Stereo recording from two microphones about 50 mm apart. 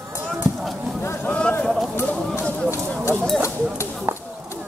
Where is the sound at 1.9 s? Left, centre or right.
Left.